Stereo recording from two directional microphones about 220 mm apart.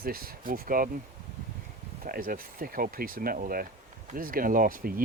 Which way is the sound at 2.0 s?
40° right (ahead or behind).